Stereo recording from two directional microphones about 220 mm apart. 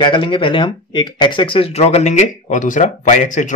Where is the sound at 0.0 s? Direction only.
20° left (ahead or behind).